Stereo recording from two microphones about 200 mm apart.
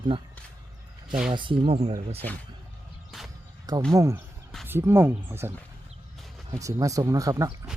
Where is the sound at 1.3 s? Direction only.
25° right (ahead or behind).